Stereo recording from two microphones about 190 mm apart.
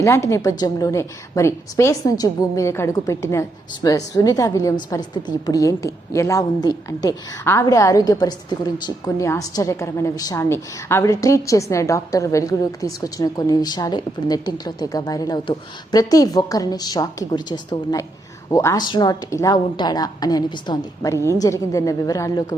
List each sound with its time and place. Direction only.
0.0 s a woman's voice: 15° left (ahead or behind)